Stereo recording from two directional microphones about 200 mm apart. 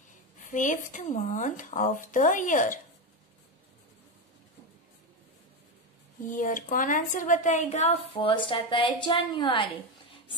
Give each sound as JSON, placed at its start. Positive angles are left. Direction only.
{"t": 0.4, "sound": "speech", "side_deg": 40}
{"t": 6.2, "sound": "a woman's voice", "side_deg": 40}